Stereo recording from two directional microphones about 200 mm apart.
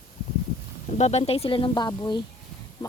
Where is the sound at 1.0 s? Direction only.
35° left (ahead or behind).